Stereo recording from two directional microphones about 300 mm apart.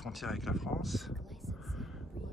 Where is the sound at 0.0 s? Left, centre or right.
Centre.